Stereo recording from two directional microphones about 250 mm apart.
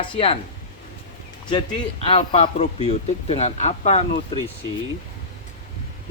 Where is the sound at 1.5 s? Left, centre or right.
Centre.